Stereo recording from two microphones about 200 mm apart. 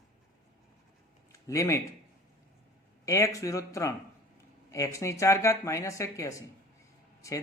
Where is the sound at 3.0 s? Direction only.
15° left (ahead or behind).